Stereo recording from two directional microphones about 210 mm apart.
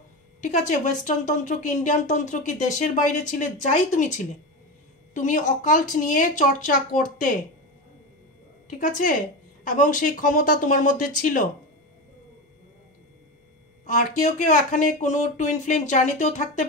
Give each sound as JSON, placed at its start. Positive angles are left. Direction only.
{"t": 0.4, "sound": "a woman's voice", "side_deg": 35}
{"t": 8.7, "sound": "a woman's voice", "side_deg": 40}
{"t": 13.8, "sound": "a woman's voice", "side_deg": 35}